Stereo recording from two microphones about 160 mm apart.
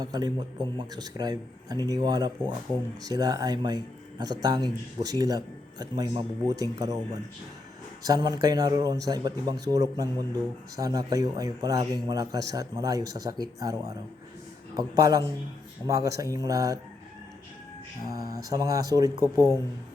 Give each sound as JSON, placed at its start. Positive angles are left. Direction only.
{"t": 0.0, "sound": "a man's voice", "side_deg": -25}
{"t": 18.1, "sound": "a man's voice", "side_deg": -20}